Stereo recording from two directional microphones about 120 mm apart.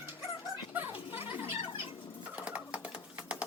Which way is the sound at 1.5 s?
50° left (ahead or behind).